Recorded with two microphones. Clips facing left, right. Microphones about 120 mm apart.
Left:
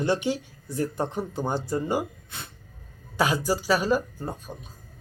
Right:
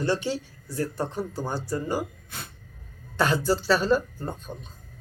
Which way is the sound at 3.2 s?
10° left (ahead or behind).